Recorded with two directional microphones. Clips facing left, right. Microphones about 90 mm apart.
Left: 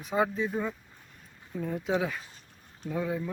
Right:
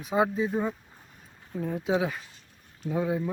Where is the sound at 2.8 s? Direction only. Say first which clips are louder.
Right 3 dB; 20° right (ahead or behind).